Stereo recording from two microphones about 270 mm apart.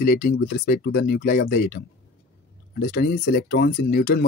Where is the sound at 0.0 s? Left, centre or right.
Left.